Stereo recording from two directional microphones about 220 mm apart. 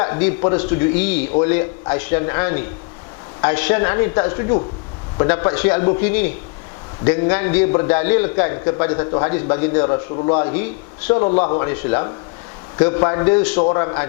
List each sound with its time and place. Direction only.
0.0 s a man's voice: 10° left (ahead or behind)